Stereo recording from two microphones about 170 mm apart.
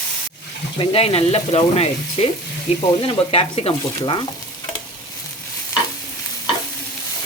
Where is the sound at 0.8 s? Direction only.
35° left (ahead or behind).